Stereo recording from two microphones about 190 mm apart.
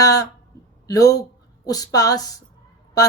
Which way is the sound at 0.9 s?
20° left (ahead or behind).